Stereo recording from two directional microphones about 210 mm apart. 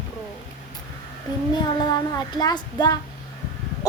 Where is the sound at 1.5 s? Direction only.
20° left (ahead or behind).